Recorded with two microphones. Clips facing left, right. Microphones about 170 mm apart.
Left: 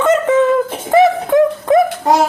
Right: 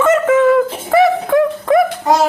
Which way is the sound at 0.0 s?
20° left (ahead or behind).